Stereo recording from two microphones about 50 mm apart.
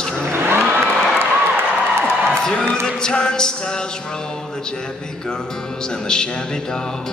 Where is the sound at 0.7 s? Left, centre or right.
Right.